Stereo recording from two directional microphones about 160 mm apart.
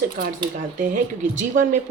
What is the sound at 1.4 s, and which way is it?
Speech, 55° right (ahead or behind).